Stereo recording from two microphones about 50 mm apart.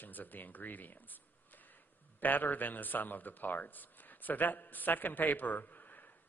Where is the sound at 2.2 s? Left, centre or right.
Left.